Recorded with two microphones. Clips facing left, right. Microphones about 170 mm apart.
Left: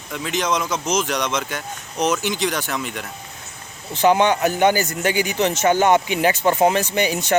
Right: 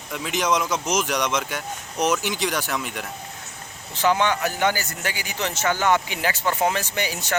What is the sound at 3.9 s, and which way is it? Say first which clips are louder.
A man's voice: left 5 dB; 20° left (ahead or behind).